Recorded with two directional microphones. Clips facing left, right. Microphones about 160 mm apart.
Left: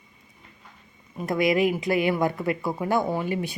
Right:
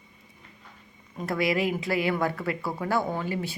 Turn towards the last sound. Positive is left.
turn(degrees=15)  # may be behind; listen again after turning